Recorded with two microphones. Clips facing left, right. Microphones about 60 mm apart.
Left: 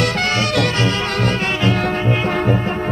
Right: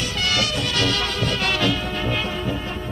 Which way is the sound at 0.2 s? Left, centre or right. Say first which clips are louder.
Left 6 dB; left.